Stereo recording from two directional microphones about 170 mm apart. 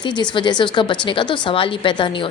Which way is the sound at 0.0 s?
25° left (ahead or behind).